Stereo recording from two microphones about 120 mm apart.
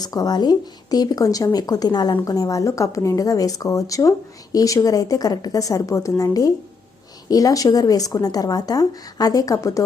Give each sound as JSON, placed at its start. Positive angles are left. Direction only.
{"t": 0.0, "sound": "a woman's voice", "side_deg": 30}